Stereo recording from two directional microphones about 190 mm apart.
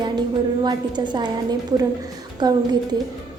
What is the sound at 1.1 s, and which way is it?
A woman's voice, 20° right (ahead or behind).